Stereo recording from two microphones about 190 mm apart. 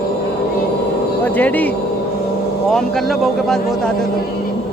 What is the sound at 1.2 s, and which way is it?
A man's voice, 10° left (ahead or behind).